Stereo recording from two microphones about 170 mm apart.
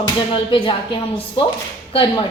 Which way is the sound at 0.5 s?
30° left (ahead or behind).